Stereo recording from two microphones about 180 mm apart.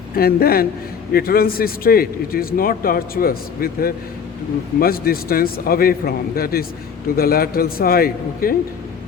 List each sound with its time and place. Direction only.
0.2 s a man's voice: 55° left (ahead or behind)